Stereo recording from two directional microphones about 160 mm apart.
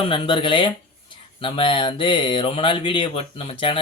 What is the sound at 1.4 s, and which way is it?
Speech, 30° left (ahead or behind).